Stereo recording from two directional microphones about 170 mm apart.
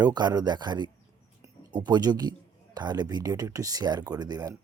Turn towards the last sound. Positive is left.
turn(degrees=-25)  # may be behind; listen again after turning